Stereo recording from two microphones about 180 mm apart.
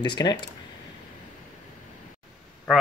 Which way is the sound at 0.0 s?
25° left (ahead or behind).